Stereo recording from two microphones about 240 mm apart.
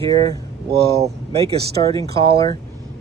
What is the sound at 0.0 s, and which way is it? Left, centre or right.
Speech, centre.